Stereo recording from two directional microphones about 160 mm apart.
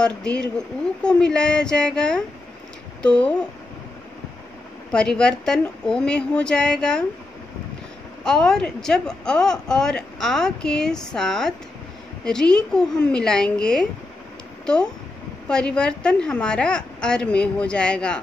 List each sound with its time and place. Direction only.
0.0 s a woman's voice: 5° left (ahead or behind)
4.9 s a woman's voice: 5° left (ahead or behind)
8.2 s a woman's voice: 5° left (ahead or behind)
15.4 s a woman's voice: 5° left (ahead or behind)